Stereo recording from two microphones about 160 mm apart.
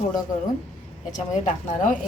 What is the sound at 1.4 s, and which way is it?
Speech, 55° left (ahead or behind).